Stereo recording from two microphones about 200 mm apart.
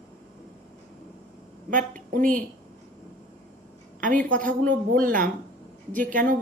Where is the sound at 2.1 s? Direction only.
45° right (ahead or behind).